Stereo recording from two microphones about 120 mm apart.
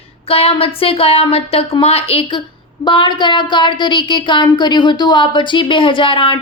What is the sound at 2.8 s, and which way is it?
A woman's voice, 40° left (ahead or behind).